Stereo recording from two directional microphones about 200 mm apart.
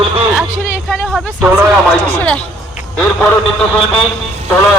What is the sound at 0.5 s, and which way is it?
Speech, centre (ahead or behind).